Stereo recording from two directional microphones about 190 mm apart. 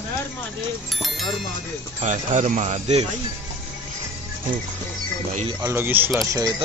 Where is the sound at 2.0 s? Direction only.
40° right (ahead or behind).